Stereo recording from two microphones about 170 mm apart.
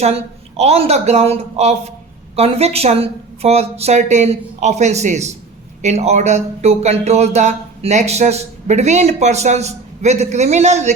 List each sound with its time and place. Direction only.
0.0 s speech: 40° right (ahead or behind)